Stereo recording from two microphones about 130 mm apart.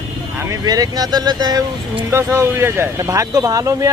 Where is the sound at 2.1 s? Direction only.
20° right (ahead or behind).